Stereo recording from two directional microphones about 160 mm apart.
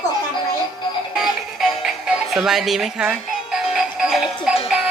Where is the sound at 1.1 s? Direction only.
Centre (ahead or behind).